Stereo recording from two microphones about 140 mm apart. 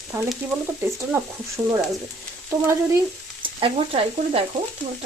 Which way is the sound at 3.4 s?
40° right (ahead or behind).